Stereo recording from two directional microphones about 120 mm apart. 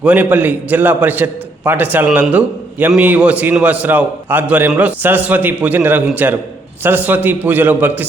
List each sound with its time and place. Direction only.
0.0 s a man's voice: 10° right (ahead or behind)